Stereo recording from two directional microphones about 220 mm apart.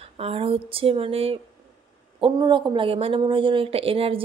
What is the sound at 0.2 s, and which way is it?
Speech, 25° right (ahead or behind).